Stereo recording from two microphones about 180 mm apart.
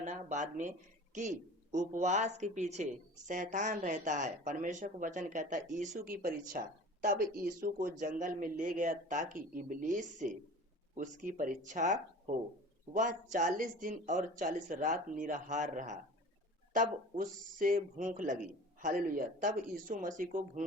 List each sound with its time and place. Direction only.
0.0 s speech: 40° right (ahead or behind)